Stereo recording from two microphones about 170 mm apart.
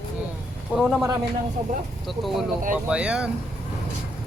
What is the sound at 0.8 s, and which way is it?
Speech, centre (ahead or behind).